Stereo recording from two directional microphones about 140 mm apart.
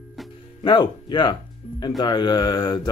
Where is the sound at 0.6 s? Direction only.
35° left (ahead or behind).